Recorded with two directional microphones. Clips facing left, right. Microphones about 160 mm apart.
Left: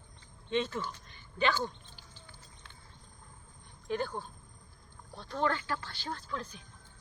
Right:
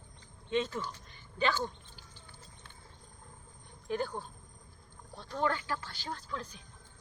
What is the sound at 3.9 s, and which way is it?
Speech, 10° right (ahead or behind).